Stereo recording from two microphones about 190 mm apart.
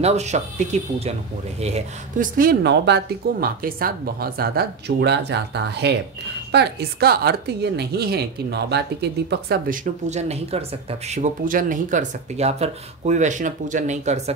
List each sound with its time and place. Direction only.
0.0 s a woman's voice: 35° right (ahead or behind); by 9.8 s 60° right (ahead or behind)
10.0 s speech: 35° right (ahead or behind)